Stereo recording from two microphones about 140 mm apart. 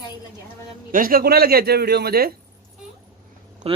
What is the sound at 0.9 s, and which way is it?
A man's voice, 90° right.